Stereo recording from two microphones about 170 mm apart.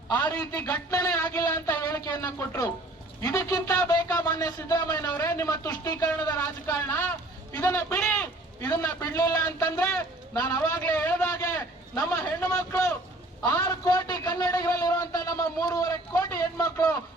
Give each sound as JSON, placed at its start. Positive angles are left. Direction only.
{"t": 0.6, "sound": "a man's voice", "side_deg": 20}
{"t": 5.1, "sound": "a man's voice", "side_deg": 15}